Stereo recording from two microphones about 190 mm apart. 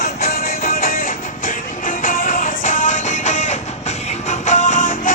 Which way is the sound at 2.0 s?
45° left (ahead or behind).